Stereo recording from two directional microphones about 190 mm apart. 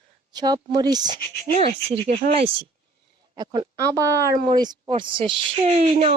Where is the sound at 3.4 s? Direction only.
20° right (ahead or behind); by 6.1 s 35° right (ahead or behind).